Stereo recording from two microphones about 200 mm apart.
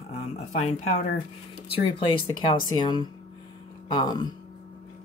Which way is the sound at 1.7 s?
25° left (ahead or behind).